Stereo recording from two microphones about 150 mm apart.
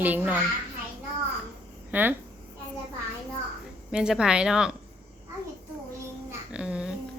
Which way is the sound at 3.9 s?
5° right (ahead or behind).